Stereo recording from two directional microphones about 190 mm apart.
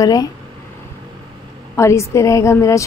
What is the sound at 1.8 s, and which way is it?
A woman's voice, 15° left (ahead or behind).